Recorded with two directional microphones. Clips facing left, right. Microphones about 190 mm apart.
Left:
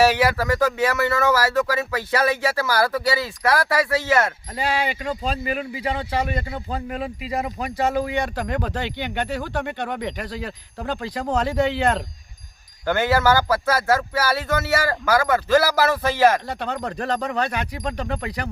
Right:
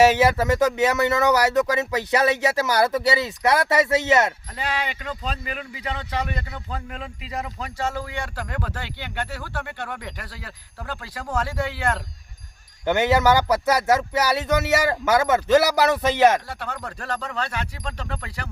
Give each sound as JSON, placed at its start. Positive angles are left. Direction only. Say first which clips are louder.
{"t": 0.0, "sound": "speech", "louder": "right 1 dB", "side_deg": -20}
{"t": 4.5, "sound": "speech", "louder": "left 4 dB", "side_deg": 35}
{"t": 6.2, "sound": "speech", "louder": "left 5 dB", "side_deg": 30}
{"t": 6.9, "sound": "speech", "louder": "left 8 dB", "side_deg": 10}
{"t": 12.8, "sound": "speech", "louder": "right 1 dB", "side_deg": -20}
{"t": 16.5, "sound": "speech", "louder": "left 5 dB", "side_deg": 20}